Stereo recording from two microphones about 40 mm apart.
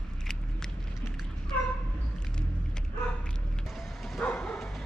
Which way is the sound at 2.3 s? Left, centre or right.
Centre.